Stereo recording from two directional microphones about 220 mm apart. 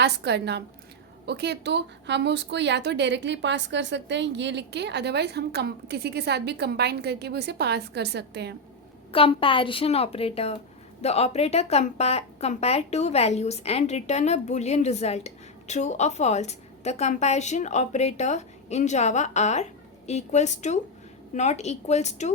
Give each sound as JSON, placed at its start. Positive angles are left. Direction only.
{"t": 0.0, "sound": "speech", "side_deg": -50}
{"t": 9.1, "sound": "a woman's voice", "side_deg": 25}